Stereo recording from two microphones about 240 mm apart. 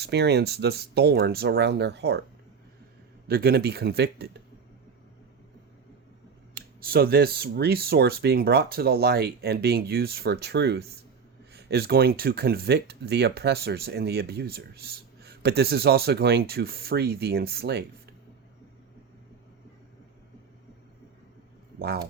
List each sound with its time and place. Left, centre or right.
0.0 s speech: right
3.2 s speech: right
6.5 s speech: right
21.8 s speech: right